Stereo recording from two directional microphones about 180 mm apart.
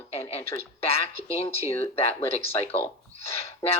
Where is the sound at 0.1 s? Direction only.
35° left (ahead or behind).